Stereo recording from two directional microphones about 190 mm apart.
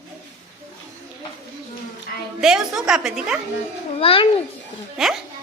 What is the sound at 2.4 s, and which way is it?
A woman's voice, 5° right (ahead or behind).